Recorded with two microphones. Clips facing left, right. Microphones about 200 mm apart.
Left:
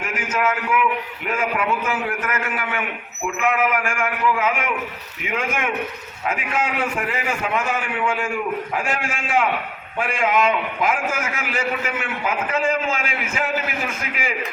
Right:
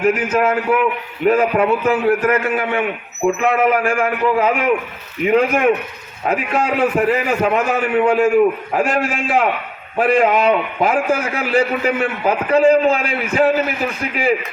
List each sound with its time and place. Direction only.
0.0 s a man's voice: 35° right (ahead or behind)